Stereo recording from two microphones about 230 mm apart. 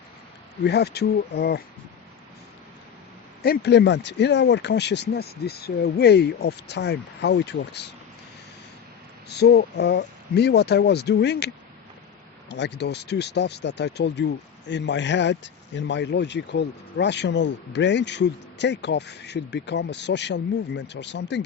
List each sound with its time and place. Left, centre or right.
0.6 s speech: left
3.4 s speech: left
9.3 s speech: left